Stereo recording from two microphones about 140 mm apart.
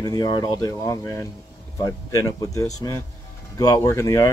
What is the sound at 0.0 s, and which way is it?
Speech, 30° left (ahead or behind).